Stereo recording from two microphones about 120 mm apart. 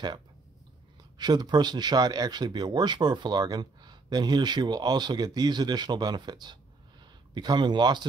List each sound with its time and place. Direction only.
1.1 s speech: 35° right (ahead or behind)